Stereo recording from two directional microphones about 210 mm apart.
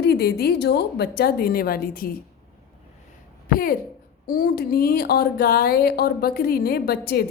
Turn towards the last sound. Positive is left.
turn(degrees=45)  # may be behind; listen again after turning